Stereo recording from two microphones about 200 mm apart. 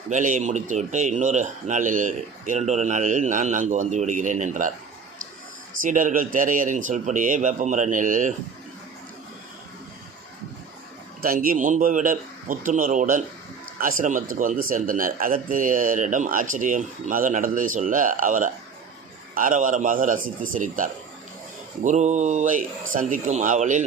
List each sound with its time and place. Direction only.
0.1 s speech: 40° right (ahead or behind)
5.8 s speech: 40° right (ahead or behind)
11.2 s a man's voice: 45° right (ahead or behind)